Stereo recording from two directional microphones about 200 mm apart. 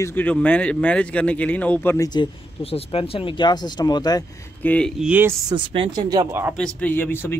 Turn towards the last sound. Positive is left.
turn(degrees=10)  # may be behind; listen again after turning